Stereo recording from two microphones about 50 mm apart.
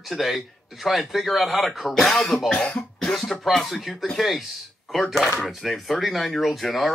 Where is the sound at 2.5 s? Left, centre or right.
Centre.